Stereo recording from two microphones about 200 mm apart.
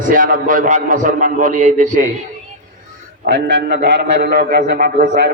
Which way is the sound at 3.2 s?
60° right (ahead or behind).